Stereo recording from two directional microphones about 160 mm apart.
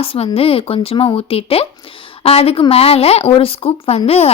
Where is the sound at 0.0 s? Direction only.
35° left (ahead or behind).